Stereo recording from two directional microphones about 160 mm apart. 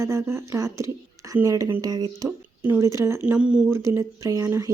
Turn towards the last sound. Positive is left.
turn(degrees=-20)  # may be behind; listen again after turning